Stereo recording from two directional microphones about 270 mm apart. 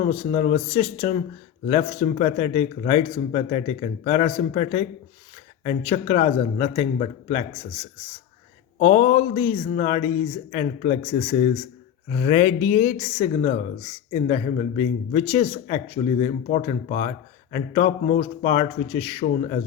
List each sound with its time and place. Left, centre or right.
0.0 s speech: left
8.8 s speech: left